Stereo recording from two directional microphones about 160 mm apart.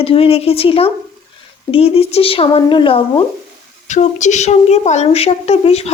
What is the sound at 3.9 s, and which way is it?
Speech, 50° left (ahead or behind).